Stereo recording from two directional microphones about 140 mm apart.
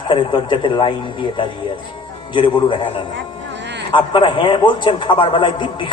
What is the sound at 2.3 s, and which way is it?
Speech, 35° left (ahead or behind).